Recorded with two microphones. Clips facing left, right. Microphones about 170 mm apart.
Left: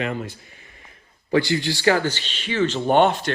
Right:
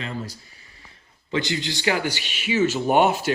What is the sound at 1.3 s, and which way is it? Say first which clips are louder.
Speech: left 5 dB; 20° right (ahead or behind).